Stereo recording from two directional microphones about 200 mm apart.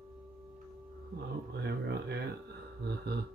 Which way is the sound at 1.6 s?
55° right (ahead or behind).